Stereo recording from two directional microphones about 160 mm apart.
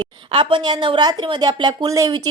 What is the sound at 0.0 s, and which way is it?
Speech, 30° right (ahead or behind).